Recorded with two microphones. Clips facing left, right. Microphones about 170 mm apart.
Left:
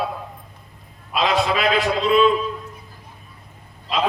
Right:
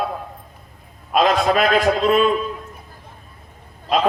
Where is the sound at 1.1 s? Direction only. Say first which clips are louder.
Right 4 dB; 50° right (ahead or behind).